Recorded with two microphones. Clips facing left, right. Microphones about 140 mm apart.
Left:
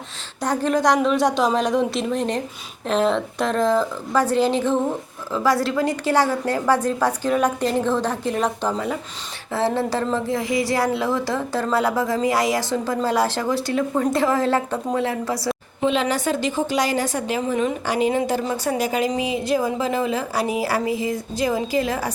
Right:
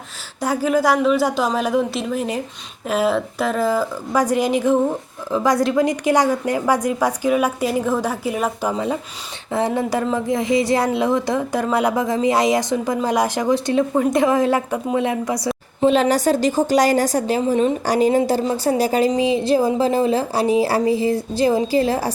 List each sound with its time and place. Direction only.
0.4 s a woman's voice: 5° right (ahead or behind)
15.8 s a woman's voice: 40° right (ahead or behind)